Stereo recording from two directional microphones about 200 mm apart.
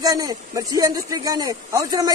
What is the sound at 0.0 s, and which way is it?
A man's voice, 20° right (ahead or behind).